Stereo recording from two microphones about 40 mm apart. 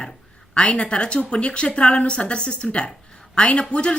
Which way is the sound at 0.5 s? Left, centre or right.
Left.